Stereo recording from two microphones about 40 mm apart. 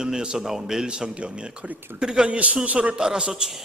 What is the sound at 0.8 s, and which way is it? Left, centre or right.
A man's voice, right.